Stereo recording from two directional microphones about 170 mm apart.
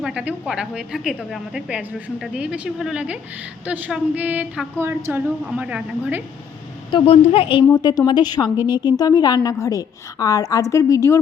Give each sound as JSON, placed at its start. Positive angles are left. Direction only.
{"t": 0.0, "sound": "a woman's voice", "side_deg": -5}
{"t": 6.9, "sound": "a woman's voice", "side_deg": 35}